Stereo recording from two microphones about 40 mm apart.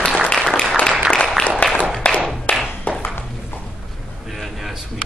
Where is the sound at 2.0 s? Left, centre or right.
Left.